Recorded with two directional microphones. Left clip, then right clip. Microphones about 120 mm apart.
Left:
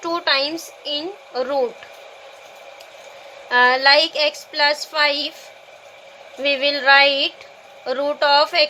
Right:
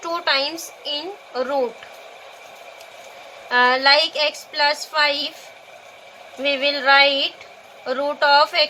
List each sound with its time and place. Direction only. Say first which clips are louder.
0.0 s speech: left 1 dB; 35° left (ahead or behind)
3.5 s a woman's voice: left 1 dB; 40° left (ahead or behind)
6.4 s a woman's voice: left 1 dB; 40° left (ahead or behind)